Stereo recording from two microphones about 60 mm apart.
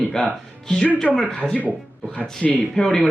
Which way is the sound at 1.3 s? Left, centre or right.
Left.